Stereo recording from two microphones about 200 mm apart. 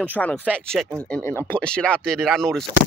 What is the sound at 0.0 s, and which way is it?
Speech, 5° left (ahead or behind).